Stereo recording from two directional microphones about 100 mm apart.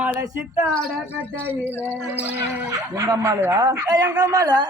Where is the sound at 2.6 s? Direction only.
35° right (ahead or behind).